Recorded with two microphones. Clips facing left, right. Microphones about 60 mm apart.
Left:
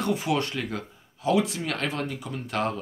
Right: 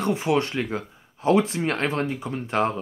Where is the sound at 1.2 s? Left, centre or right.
Right.